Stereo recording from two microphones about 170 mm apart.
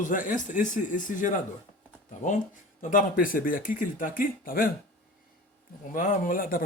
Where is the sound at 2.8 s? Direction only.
55° left (ahead or behind).